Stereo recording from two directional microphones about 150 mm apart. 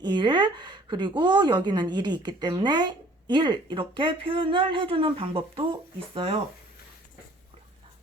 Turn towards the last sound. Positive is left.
turn(degrees=-45)  # may be behind; listen again after turning